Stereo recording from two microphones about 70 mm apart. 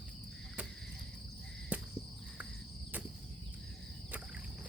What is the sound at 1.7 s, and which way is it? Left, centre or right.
Cricket, right.